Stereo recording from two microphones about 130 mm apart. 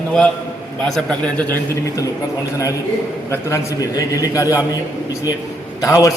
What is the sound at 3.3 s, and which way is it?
A man's voice, 25° left (ahead or behind).